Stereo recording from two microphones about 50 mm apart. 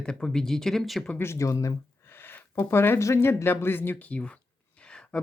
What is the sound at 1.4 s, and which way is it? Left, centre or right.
Speech, left.